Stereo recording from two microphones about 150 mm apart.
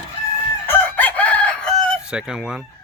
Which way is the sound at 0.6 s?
10° left (ahead or behind).